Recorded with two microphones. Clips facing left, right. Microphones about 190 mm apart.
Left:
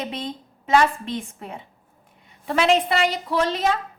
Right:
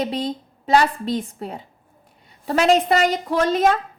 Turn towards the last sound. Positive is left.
turn(degrees=-50)  # may be behind; listen again after turning